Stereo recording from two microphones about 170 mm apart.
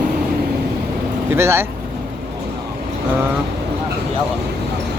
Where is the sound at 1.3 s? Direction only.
15° right (ahead or behind).